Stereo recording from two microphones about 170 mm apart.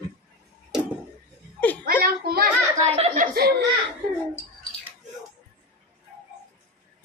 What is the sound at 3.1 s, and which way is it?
Laughter, 60° right (ahead or behind).